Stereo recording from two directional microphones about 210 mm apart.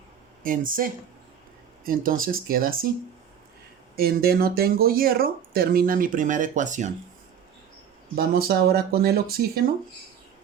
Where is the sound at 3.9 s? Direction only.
45° right (ahead or behind).